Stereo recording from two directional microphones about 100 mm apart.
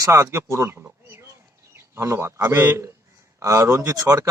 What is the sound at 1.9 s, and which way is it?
Speech, 30° right (ahead or behind).